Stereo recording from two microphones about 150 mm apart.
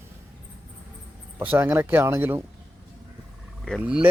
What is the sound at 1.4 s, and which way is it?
Speech, 10° right (ahead or behind).